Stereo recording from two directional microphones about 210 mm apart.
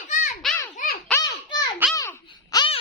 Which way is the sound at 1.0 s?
15° left (ahead or behind).